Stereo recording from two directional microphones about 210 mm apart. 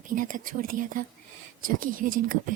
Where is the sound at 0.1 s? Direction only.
40° right (ahead or behind).